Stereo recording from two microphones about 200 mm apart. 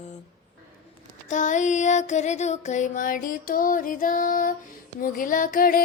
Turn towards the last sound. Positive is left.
turn(degrees=45)  # may be behind; listen again after turning